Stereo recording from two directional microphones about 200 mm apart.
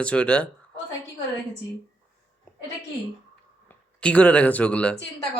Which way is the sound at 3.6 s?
5° left (ahead or behind).